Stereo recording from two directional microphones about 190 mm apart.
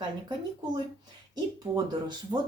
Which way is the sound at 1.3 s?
20° right (ahead or behind).